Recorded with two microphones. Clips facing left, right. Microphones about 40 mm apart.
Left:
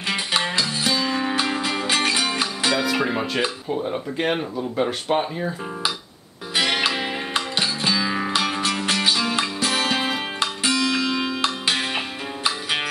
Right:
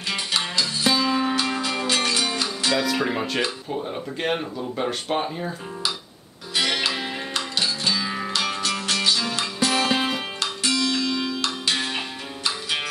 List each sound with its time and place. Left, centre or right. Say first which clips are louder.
0.1 s music: left 3 dB; centre
0.8 s music: right 4 dB; centre; by 2.7 s left
2.7 s speech: even; centre
6.5 s music: left 2 dB; left
8.4 s music: left 3 dB; centre
9.7 s music: right 2 dB; centre
10.4 s music: left 2 dB; centre